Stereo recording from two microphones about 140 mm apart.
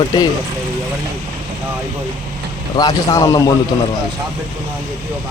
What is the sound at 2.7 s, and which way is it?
Speech, 25° left (ahead or behind).